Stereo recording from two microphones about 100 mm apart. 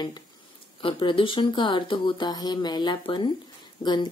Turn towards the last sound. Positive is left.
turn(degrees=45)  # may be behind; listen again after turning